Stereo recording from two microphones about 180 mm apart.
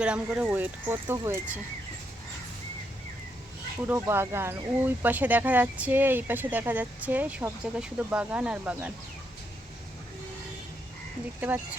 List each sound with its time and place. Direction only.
0.0 s speech: 5° right (ahead or behind)
3.8 s speech: 15° right (ahead or behind)
11.3 s speech: 10° right (ahead or behind)